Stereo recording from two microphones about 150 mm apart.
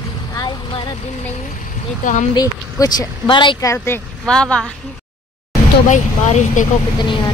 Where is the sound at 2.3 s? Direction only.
25° left (ahead or behind).